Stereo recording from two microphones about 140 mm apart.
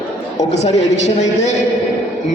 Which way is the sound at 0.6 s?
55° left (ahead or behind).